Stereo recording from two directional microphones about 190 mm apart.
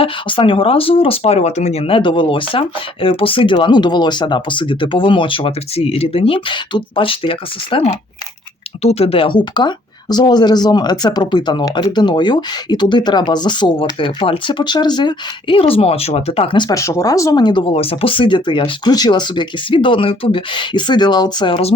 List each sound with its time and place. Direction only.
0.0 s speech: 25° left (ahead or behind)